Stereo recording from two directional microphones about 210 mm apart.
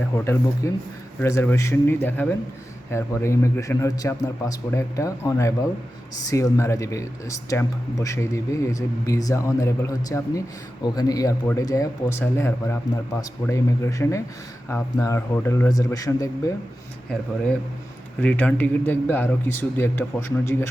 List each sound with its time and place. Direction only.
0.6 s speech: 15° left (ahead or behind)
18.2 s speech: 5° left (ahead or behind)